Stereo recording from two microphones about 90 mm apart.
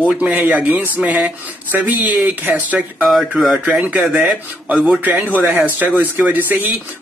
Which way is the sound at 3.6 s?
15° right (ahead or behind).